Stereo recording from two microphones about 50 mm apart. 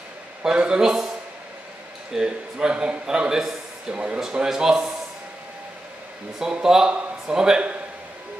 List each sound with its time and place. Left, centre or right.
0.4 s a man's voice: centre
2.1 s a man's voice: centre
6.4 s a man's voice: centre